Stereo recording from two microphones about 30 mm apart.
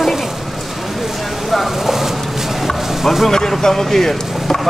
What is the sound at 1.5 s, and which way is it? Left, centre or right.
Vehicle, centre.